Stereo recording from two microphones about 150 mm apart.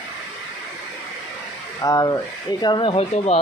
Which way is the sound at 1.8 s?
25° left (ahead or behind).